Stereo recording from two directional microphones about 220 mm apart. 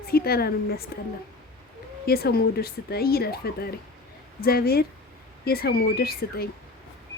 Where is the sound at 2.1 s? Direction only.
45° left (ahead or behind).